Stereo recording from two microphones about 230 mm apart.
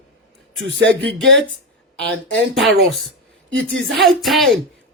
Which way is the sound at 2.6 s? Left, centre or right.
Centre.